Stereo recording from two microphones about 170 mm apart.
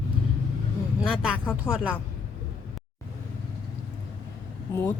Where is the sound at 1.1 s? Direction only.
5° right (ahead or behind).